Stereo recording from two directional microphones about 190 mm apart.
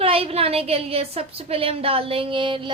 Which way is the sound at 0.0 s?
30° right (ahead or behind).